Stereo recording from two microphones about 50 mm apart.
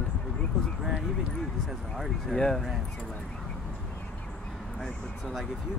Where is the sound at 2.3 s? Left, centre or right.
Centre.